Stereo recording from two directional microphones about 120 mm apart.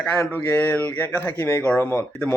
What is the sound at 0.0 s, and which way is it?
A man's voice, 15° left (ahead or behind).